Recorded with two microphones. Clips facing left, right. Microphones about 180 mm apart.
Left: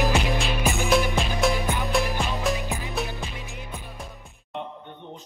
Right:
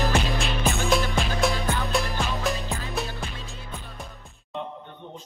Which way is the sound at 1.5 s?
15° left (ahead or behind).